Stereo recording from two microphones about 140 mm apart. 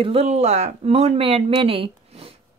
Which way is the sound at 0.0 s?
45° right (ahead or behind).